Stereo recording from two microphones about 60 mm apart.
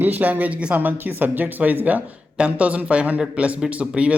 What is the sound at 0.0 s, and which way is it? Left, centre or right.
Speech, right.